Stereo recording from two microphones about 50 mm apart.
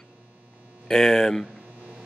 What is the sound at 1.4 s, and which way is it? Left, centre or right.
Hum, right.